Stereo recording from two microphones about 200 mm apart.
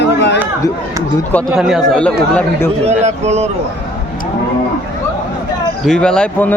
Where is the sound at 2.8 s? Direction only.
35° right (ahead or behind).